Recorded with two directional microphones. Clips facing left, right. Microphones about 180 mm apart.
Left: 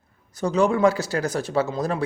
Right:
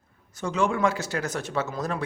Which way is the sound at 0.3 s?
35° left (ahead or behind).